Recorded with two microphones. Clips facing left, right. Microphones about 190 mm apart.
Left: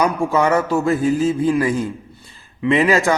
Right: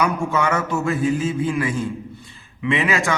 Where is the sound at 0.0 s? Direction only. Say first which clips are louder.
Left 4 dB; 35° left (ahead or behind).